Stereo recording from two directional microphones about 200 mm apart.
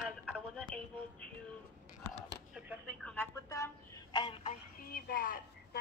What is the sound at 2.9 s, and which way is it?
Speech, 5° left (ahead or behind).